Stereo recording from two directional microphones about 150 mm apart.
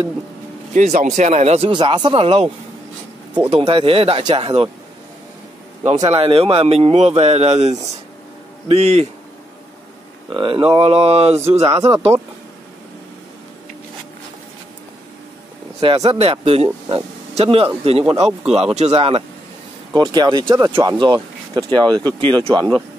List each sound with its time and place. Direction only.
0.7 s speech: 55° right (ahead or behind)
1.7 s speech: 30° right (ahead or behind)
3.5 s speech: 35° right (ahead or behind)
6.0 s speech: 40° right (ahead or behind)
10.3 s speech: 35° right (ahead or behind)
11.9 s speech: 15° right (ahead or behind)
15.8 s speech: 40° right (ahead or behind)
19.9 s speech: 25° right (ahead or behind)
20.7 s speech: 30° right (ahead or behind)